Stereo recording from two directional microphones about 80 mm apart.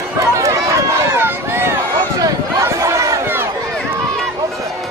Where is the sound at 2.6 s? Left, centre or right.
Right.